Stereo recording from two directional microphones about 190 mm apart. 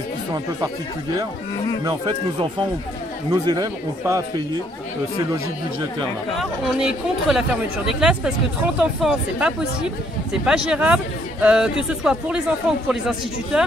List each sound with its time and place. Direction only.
3.3 s speech: 20° right (ahead or behind)
6.3 s speech: centre (ahead or behind)